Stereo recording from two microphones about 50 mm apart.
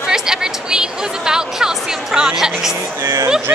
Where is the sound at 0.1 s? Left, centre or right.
Centre.